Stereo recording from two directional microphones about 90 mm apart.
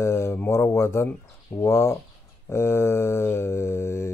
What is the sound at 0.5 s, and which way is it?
Speech, 30° left (ahead or behind).